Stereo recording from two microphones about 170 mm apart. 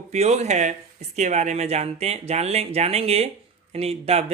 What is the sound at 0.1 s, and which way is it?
Speech, 40° right (ahead or behind).